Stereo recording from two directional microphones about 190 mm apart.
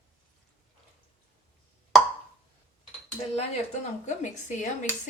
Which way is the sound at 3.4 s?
35° left (ahead or behind).